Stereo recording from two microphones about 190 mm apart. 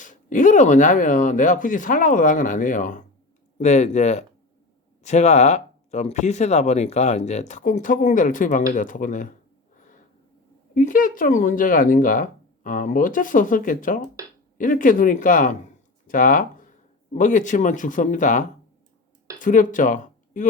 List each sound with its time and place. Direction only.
0.0 s speech: 45° left (ahead or behind)
10.8 s speech: 45° left (ahead or behind)
16.0 s a sound: 45° left (ahead or behind)
17.2 s speech: 40° left (ahead or behind)